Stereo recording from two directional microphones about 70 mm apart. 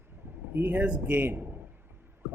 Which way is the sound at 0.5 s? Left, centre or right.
Right.